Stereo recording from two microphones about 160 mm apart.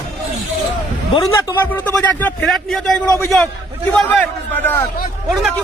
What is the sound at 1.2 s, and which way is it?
A man's voice, 20° left (ahead or behind).